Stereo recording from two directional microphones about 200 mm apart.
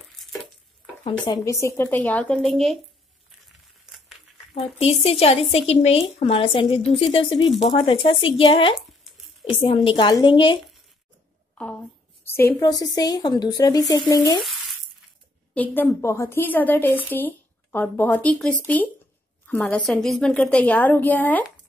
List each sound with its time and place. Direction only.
0.1 s a sound: centre (ahead or behind)
1.2 s a woman's voice: 15° left (ahead or behind); by 2.8 s centre (ahead or behind)
4.7 s a woman's voice: 30° left (ahead or behind)
8.7 s a sound: centre (ahead or behind)
9.5 s a woman's voice: 25° left (ahead or behind)
12.3 s a woman's voice: 10° left (ahead or behind)
15.5 s a woman's voice: 10° left (ahead or behind)